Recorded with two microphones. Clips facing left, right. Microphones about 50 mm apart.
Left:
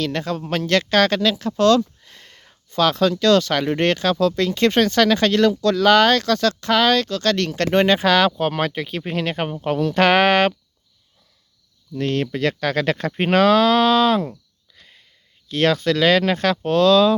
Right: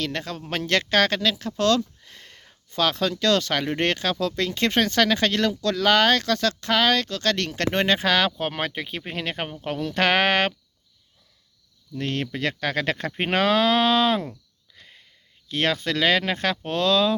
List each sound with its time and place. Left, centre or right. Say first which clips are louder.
0.0 s speech: left 6 dB; centre
0.5 s speech: left 3 dB; centre
2.0 s a sound: left 1 dB; centre
2.7 s speech: left 6 dB; centre
7.7 s speech: left 6 dB; centre
11.9 s speech: left 6 dB; centre
14.8 s a sound: even; right
15.4 s speech: left 6 dB; centre